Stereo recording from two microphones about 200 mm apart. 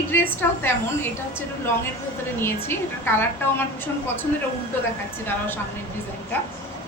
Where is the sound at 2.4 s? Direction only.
10° left (ahead or behind).